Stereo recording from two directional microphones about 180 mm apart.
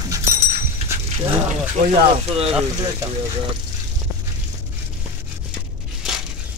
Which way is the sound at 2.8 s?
20° right (ahead or behind).